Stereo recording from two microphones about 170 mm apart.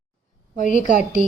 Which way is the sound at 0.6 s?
45° left (ahead or behind).